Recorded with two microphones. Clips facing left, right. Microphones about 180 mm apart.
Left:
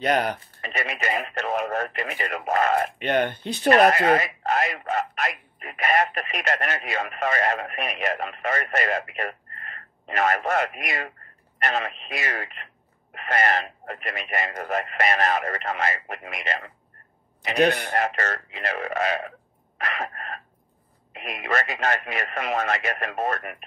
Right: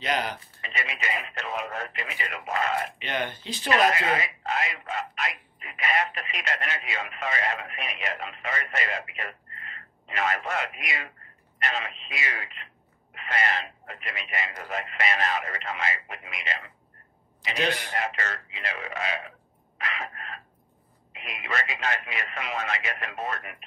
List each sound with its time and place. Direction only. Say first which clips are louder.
0.0 s speech: left 6 dB; 55° left (ahead or behind)
17.4 s speech: left 8 dB; 55° left (ahead or behind)